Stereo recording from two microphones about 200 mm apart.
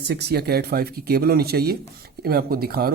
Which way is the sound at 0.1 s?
55° right (ahead or behind).